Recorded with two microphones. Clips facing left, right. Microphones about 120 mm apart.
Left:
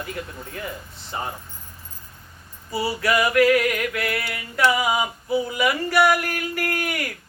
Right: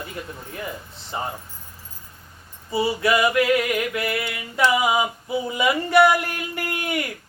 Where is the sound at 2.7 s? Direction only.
20° right (ahead or behind).